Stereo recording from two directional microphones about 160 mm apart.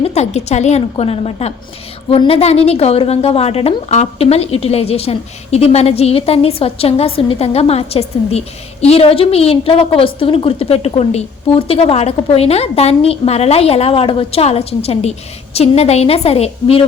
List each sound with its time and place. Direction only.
0.0 s a woman's voice: 45° left (ahead or behind)